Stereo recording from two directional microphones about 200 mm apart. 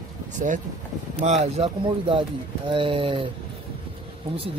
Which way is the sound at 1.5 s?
25° right (ahead or behind).